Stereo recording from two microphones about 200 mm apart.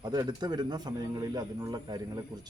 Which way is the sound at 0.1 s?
20° right (ahead or behind).